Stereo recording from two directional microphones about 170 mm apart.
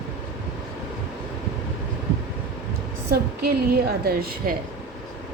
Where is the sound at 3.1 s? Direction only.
65° right (ahead or behind).